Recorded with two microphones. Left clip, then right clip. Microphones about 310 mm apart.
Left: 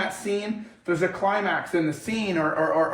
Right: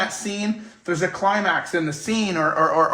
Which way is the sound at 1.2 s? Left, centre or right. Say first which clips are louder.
Right 4 dB; right.